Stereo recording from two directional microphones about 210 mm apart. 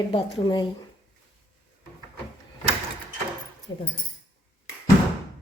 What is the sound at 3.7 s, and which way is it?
Speech, 15° left (ahead or behind).